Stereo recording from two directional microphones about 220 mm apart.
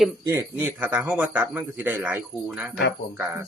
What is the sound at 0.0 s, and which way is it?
A man's voice, 10° right (ahead or behind).